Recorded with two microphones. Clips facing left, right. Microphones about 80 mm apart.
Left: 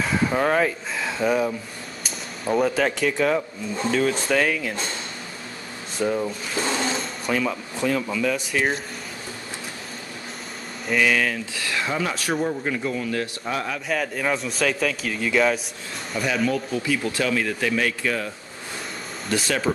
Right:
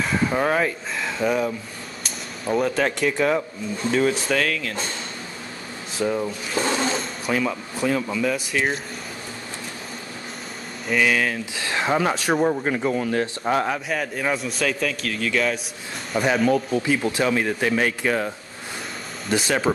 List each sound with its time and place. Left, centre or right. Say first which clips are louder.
0.0 s speech: even; centre
4.3 s speech: left 1 dB; centre
5.9 s a man's voice: even; centre
10.9 s a man's voice: even; centre
11.5 s a sound: right 2 dB; right
11.9 s speech: right 6 dB; right
13.8 s a man's voice: even; centre
16.2 s speech: right 4 dB; right
19.2 s speech: right 2 dB; centre